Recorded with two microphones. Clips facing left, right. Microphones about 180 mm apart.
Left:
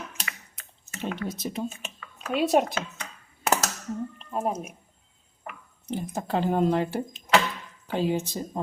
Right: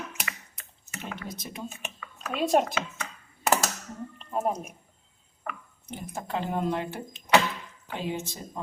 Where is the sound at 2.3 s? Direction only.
5° left (ahead or behind).